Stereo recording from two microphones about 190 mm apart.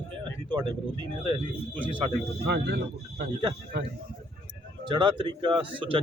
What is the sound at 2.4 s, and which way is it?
Speech, 60° right (ahead or behind).